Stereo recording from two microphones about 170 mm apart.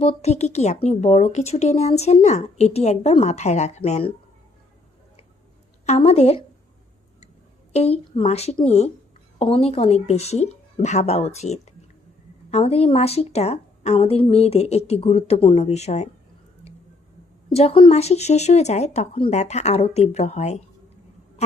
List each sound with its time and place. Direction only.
0.0 s speech: 40° left (ahead or behind)
5.8 s speech: 40° left (ahead or behind)
7.7 s speech: 35° left (ahead or behind)
17.5 s speech: 35° left (ahead or behind)